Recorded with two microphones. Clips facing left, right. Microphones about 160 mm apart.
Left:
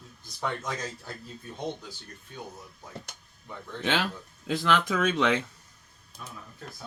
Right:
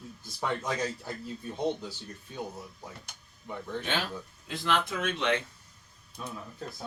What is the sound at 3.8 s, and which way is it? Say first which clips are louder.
Speech: left 7 dB; 90° left.